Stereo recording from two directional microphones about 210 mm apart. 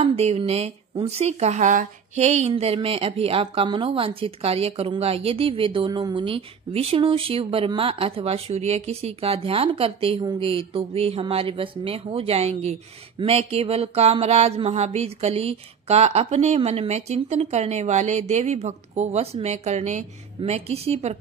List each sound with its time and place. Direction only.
0.0 s speech: 30° right (ahead or behind)